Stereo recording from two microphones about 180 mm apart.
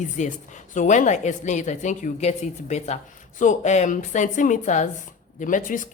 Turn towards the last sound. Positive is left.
turn(degrees=45)  # may be behind; listen again after turning